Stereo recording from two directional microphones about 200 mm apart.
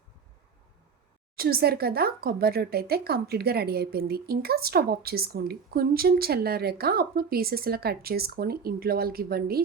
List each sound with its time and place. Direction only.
1.4 s speech: 50° right (ahead or behind)